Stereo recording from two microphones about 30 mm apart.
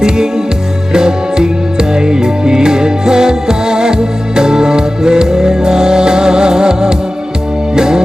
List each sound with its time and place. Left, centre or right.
0.9 s music: right